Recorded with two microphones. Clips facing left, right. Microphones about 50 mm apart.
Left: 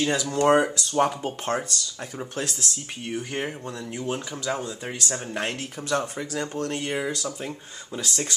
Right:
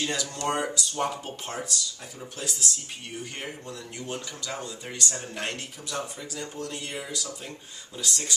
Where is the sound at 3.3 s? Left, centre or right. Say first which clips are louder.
Left 7 dB; left.